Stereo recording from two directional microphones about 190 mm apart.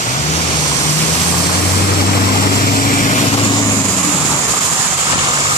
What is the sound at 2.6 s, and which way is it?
Vehicle, 45° left (ahead or behind).